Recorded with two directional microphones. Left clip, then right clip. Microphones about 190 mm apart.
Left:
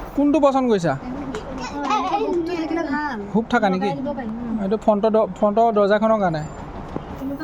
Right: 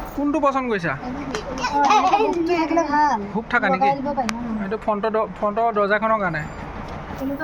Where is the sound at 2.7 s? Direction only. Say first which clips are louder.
Right 8 dB; centre (ahead or behind).